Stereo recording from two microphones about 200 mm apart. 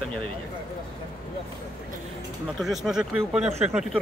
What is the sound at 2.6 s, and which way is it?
Speech, centre (ahead or behind).